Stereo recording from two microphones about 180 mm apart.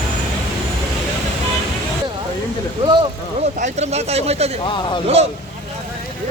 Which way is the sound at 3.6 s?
35° right (ahead or behind).